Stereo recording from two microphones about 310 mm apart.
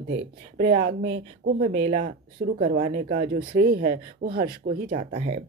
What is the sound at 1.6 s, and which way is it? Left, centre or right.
Speech, centre.